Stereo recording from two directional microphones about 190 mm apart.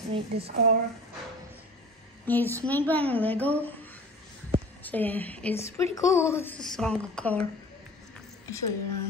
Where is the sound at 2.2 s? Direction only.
10° left (ahead or behind).